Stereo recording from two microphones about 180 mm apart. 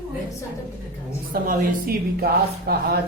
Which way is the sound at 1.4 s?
55° right (ahead or behind).